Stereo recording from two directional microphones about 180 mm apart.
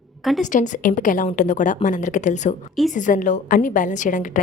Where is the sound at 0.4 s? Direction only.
45° left (ahead or behind).